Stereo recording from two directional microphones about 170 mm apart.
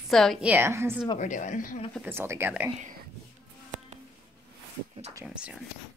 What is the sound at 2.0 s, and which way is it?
Speech, 15° right (ahead or behind).